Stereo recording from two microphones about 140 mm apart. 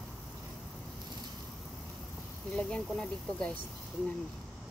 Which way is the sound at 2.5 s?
5° left (ahead or behind).